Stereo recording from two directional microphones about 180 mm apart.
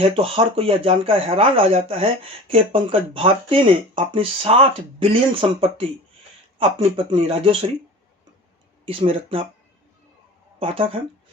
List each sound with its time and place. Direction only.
0.0 s speech: 30° right (ahead or behind)
8.9 s speech: 30° right (ahead or behind)
10.6 s speech: 30° right (ahead or behind)